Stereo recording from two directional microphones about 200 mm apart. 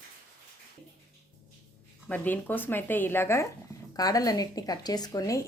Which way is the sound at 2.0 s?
10° left (ahead or behind).